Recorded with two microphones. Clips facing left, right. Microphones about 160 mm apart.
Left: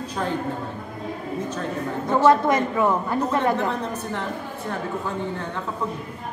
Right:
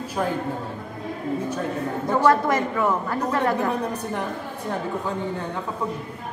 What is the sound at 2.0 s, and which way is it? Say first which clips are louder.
A woman's voice: left 2 dB; 20° left (ahead or behind).